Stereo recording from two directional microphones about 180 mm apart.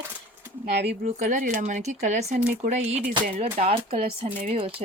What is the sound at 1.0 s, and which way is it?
Speech, 45° right (ahead or behind).